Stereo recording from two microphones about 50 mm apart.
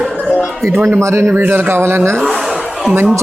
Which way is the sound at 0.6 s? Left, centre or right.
Right.